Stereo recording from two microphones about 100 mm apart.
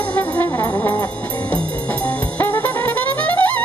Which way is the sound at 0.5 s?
35° left (ahead or behind).